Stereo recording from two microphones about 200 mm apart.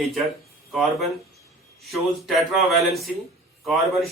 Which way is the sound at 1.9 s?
Centre (ahead or behind).